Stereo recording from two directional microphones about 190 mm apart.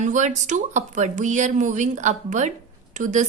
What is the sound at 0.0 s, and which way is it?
A woman's voice, 40° right (ahead or behind).